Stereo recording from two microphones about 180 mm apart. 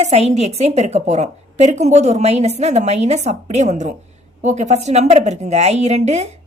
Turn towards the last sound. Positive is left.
turn(degrees=-40)  # may be behind; listen again after turning